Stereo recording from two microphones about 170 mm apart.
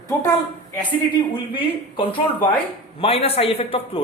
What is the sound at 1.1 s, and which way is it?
A man's voice, 30° left (ahead or behind).